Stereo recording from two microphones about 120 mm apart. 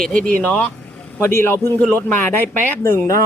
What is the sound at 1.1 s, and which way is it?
Speech, 20° left (ahead or behind).